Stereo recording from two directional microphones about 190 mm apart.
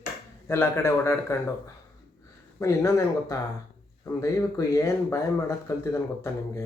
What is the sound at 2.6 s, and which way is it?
Speech, 15° left (ahead or behind).